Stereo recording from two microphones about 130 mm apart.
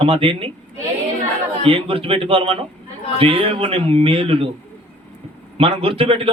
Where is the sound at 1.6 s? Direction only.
45° right (ahead or behind).